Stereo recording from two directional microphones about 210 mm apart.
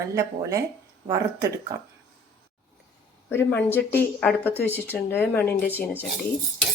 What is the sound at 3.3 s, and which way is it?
Speech, 10° left (ahead or behind).